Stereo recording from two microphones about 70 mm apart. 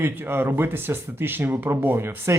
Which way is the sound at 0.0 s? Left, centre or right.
Right.